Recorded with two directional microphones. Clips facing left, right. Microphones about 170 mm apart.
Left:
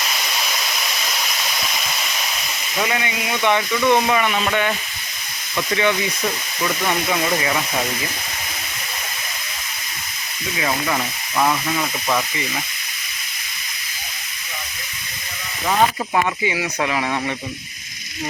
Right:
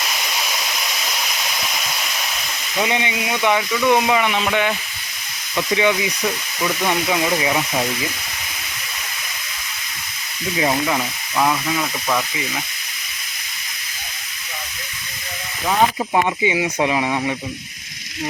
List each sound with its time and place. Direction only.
1.7 s waterfall: centre (ahead or behind)
2.7 s speech: 20° right (ahead or behind)
10.8 s speech: 5° right (ahead or behind)
16.1 s speech: 20° right (ahead or behind)